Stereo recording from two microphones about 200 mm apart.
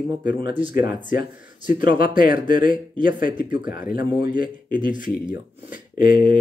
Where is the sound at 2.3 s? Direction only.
25° right (ahead or behind).